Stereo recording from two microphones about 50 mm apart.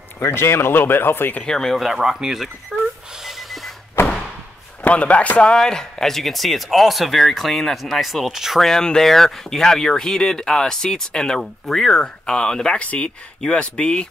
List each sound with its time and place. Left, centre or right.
0.2 s speech: left
1.4 s speech: centre
1.8 s speech: centre
2.7 s a sound: centre
3.3 s snort: centre
4.0 s a sound: left
4.8 s speech: left; by 8.6 s centre
8.6 s speech: centre
12.7 s speech: left